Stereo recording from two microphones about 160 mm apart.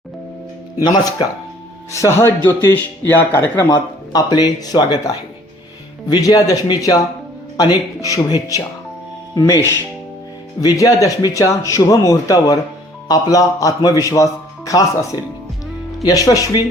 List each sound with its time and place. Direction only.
1.9 s speech: 20° left (ahead or behind)
3.7 s a man's voice: 25° left (ahead or behind)